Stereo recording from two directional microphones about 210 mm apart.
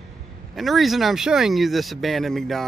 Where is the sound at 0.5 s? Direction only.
Centre (ahead or behind).